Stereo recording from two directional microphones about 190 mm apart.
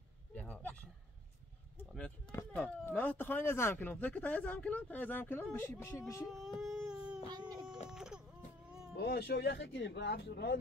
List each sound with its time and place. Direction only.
0.3 s a sound: 10° left (ahead or behind)
1.8 s a sound: 5° left (ahead or behind)
2.5 s speech: 5° left (ahead or behind)
6.2 s speech: centre (ahead or behind)
6.6 s baby cry: centre (ahead or behind)
7.2 s baby cry: 20° right (ahead or behind)
7.9 s vehicle: 5° right (ahead or behind)
8.9 s speech: 60° left (ahead or behind)